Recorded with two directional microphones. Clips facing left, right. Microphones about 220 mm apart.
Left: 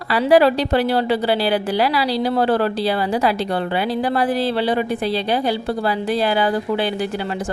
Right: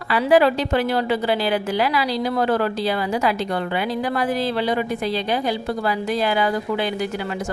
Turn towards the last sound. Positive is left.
turn(degrees=30)  # may be behind; listen again after turning